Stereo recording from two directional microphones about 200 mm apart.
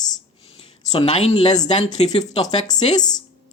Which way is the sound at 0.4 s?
30° left (ahead or behind).